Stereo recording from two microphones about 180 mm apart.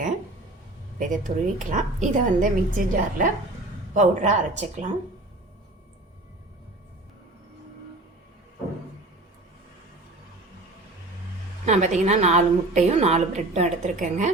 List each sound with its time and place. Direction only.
0.9 s a woman's voice: 45° right (ahead or behind)
11.6 s a woman's voice: 40° right (ahead or behind)